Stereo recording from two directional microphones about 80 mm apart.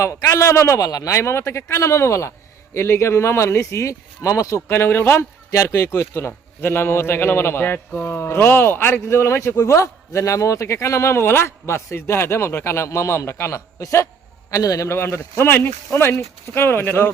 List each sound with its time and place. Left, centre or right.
0.0 s a man's voice: left
4.7 s speech: left
5.5 s a man's voice: left
14.8 s speech: left